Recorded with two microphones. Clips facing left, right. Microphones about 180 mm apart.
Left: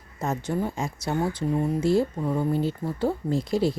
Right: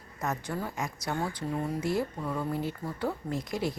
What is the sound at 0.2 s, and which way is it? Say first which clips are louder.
A woman's voice: left 6 dB; 25° left (ahead or behind).